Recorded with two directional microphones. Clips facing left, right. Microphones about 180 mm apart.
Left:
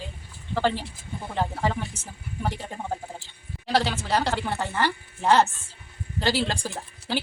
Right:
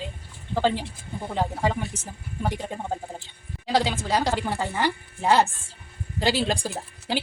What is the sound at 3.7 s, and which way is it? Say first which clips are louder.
Speech: right 1 dB; 15° right (ahead or behind).